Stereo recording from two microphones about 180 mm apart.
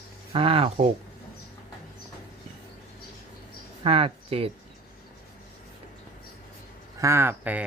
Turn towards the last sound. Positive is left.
turn(degrees=-10)  # may be behind; listen again after turning